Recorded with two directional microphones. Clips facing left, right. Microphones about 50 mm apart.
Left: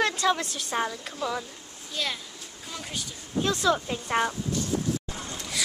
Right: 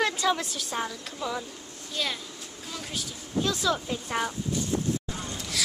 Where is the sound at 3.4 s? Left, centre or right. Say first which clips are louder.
Left 4 dB; centre.